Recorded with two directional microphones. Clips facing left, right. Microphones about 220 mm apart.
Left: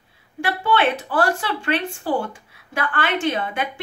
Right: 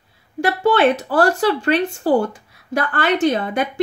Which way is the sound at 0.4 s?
40° right (ahead or behind).